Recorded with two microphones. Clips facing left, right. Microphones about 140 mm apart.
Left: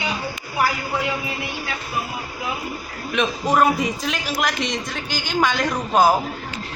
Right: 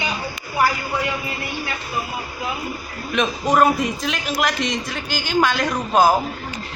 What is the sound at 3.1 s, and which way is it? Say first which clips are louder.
Speech: right 1 dB; centre (ahead or behind).